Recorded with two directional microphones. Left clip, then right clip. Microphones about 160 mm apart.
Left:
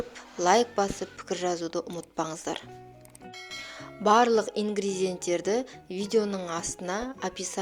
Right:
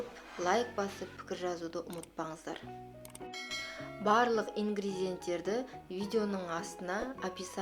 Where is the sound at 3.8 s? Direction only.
50° left (ahead or behind).